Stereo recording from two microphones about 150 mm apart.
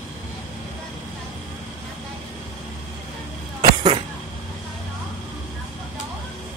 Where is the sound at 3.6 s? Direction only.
30° right (ahead or behind).